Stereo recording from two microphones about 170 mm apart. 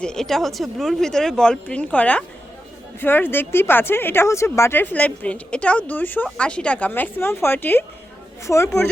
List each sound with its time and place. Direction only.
0.0 s speech: 5° left (ahead or behind)